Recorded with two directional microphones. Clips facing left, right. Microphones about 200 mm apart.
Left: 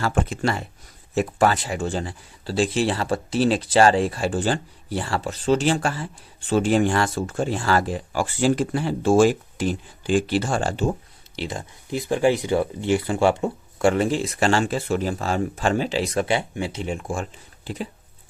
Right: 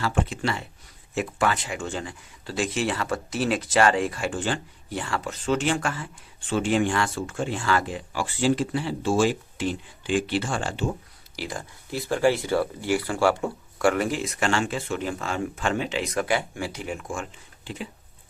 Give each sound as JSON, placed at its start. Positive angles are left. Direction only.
{"t": 0.0, "sound": "speech", "side_deg": 45}
{"t": 11.3, "sound": "speech", "side_deg": 25}